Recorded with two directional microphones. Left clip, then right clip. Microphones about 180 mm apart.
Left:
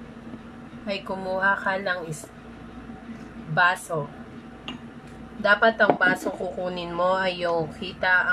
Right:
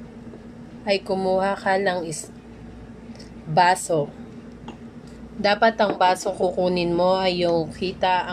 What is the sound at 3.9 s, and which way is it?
Speech, 25° right (ahead or behind).